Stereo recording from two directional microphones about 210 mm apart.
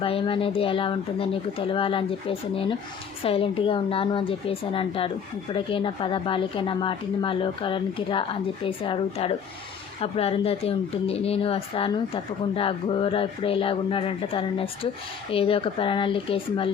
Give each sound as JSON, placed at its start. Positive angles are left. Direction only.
{"t": 0.0, "sound": "a woman's voice", "side_deg": 25}